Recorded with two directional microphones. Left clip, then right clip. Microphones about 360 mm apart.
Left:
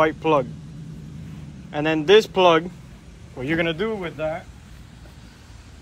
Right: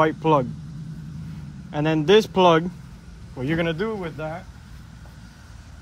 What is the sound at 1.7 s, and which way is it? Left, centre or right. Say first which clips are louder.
Speech: left 2 dB; right.